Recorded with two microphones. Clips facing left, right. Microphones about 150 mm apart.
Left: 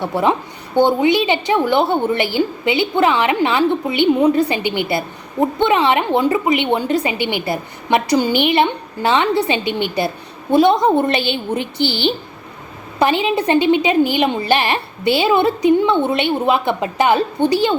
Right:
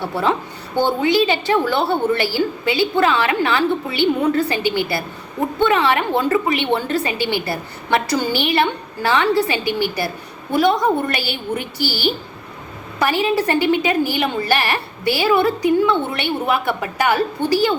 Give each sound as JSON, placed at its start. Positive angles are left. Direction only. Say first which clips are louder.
{"t": 0.0, "sound": "a woman's voice", "louder": "left 3 dB", "side_deg": 20}